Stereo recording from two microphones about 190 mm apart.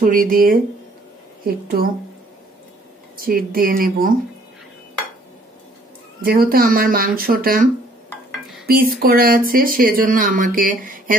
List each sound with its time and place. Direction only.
0.0 s speech: 45° right (ahead or behind)
3.2 s speech: 50° right (ahead or behind)
6.2 s speech: 50° right (ahead or behind)
8.6 s speech: 50° right (ahead or behind)